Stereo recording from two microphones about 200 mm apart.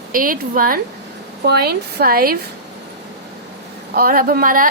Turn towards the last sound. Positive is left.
turn(degrees=-45)  # may be behind; listen again after turning